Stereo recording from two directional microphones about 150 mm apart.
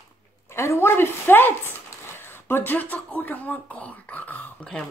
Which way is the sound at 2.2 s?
15° left (ahead or behind).